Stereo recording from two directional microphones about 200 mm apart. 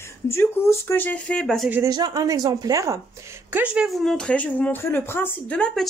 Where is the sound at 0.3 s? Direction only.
10° left (ahead or behind).